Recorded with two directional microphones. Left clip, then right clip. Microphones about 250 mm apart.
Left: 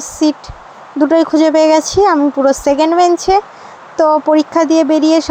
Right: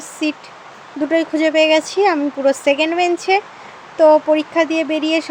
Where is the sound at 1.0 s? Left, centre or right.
Centre.